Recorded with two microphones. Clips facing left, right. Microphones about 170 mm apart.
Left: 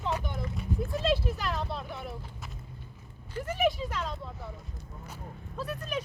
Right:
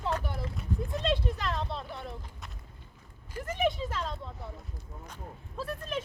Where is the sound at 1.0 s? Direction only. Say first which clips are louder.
Left 2 dB; 5° left (ahead or behind).